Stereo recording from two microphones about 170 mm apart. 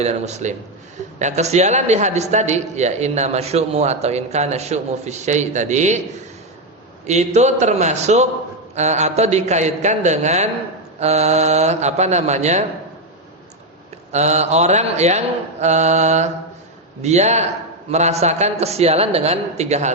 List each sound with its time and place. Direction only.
0.0 s a man's voice: 40° right (ahead or behind)
7.0 s a man's voice: 40° right (ahead or behind)
14.1 s a man's voice: 40° right (ahead or behind)
15.6 s mantra: 40° right (ahead or behind)
17.0 s a man's voice: 40° right (ahead or behind)